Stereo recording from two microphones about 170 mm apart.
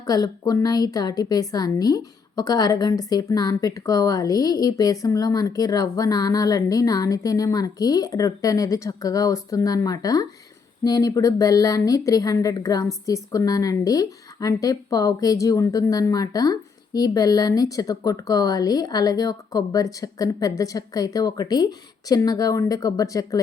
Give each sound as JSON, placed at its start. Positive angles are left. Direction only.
{"t": 0.1, "sound": "a woman's voice", "side_deg": 20}